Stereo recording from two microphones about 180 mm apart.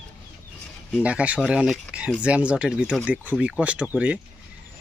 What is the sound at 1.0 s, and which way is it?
Speech, 5° right (ahead or behind).